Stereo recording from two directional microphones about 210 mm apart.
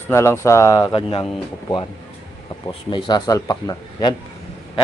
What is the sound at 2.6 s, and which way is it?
Cutlery, 25° left (ahead or behind).